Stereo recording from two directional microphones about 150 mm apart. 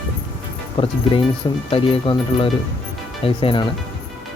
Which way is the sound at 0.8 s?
40° left (ahead or behind).